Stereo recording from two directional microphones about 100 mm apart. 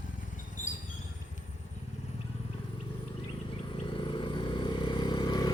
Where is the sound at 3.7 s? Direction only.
60° left (ahead or behind); by 5.5 s 45° left (ahead or behind).